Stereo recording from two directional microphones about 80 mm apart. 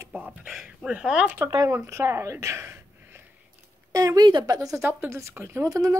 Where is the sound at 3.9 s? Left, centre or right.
Right.